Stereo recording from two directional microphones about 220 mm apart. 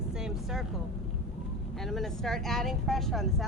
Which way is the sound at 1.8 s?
Centre (ahead or behind).